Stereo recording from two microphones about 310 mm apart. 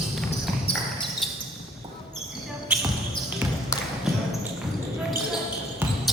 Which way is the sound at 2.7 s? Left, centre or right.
Centre.